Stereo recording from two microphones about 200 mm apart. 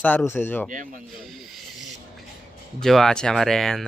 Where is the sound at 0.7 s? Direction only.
40° right (ahead or behind).